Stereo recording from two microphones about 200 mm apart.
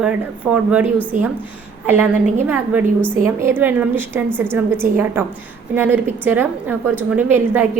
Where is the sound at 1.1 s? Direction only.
40° right (ahead or behind).